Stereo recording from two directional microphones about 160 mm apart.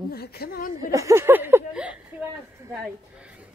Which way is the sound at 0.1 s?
80° left.